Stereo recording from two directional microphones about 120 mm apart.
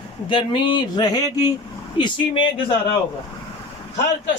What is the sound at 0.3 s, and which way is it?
A man's voice, 45° left (ahead or behind).